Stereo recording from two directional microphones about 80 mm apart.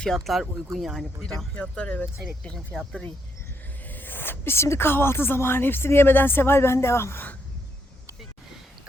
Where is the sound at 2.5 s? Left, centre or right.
Centre.